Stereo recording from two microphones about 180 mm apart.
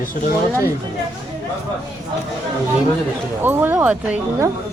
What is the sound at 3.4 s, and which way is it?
Speech, 10° right (ahead or behind).